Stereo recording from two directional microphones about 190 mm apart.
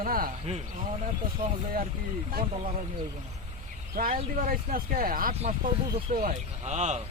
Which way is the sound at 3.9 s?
50° right (ahead or behind).